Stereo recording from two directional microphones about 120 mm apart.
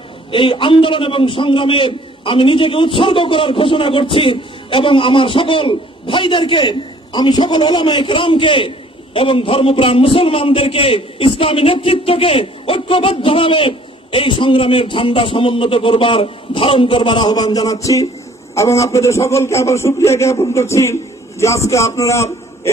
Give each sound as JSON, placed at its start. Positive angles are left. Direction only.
{"t": 0.3, "sound": "a man's voice", "side_deg": 45}